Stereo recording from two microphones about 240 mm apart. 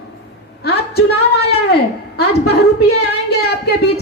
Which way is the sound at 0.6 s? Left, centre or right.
Left.